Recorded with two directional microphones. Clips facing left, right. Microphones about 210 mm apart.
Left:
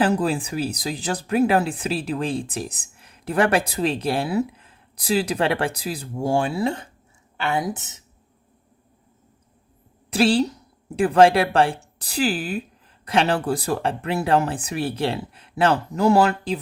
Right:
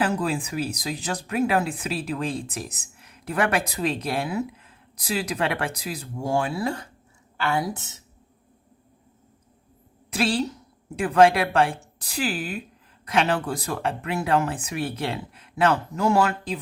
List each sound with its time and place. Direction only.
0.0 s a woman's voice: 30° left (ahead or behind)
10.1 s a woman's voice: 30° left (ahead or behind)